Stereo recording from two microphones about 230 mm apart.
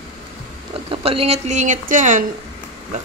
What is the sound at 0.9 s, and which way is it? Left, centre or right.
Speech, right.